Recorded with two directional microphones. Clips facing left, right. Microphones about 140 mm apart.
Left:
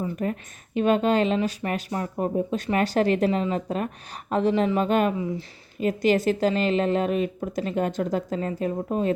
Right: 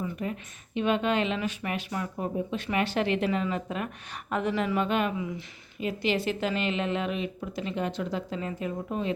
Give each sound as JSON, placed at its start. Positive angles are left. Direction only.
{"t": 0.0, "sound": "speech", "side_deg": 45}